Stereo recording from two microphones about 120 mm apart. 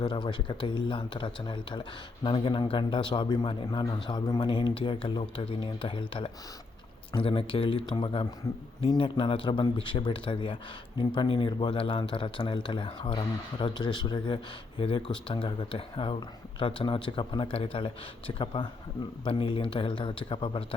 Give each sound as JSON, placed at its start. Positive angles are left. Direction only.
{"t": 0.0, "sound": "speech", "side_deg": 40}